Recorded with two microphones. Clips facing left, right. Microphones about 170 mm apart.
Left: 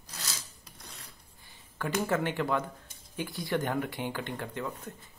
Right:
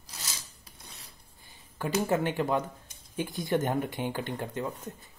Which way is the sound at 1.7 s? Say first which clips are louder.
Right 2 dB; 15° right (ahead or behind).